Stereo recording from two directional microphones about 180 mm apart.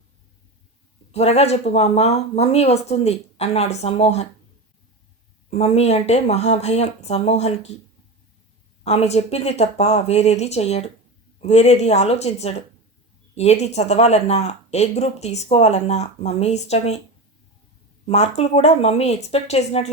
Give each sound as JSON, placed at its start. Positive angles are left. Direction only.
{"t": 1.1, "sound": "speech", "side_deg": 35}
{"t": 5.5, "sound": "speech", "side_deg": 35}
{"t": 8.8, "sound": "speech", "side_deg": 35}
{"t": 18.0, "sound": "speech", "side_deg": 35}